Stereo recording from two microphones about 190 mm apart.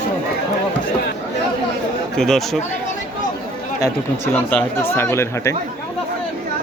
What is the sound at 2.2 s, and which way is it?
Speech, centre (ahead or behind).